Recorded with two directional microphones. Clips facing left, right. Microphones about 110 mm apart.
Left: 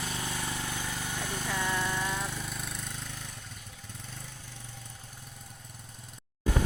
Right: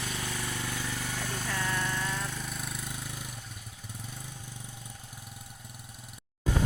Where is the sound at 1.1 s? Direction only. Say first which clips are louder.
Left 3 dB; 15° left (ahead or behind).